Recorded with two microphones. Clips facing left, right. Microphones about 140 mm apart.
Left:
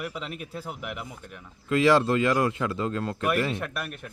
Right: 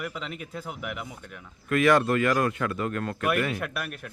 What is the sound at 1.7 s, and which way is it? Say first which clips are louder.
Speech: left 1 dB; 25° left (ahead or behind).